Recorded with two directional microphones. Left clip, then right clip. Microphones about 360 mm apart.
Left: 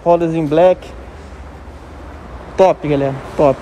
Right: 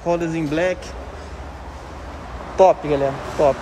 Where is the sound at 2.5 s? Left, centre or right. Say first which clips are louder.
Left 2 dB; centre.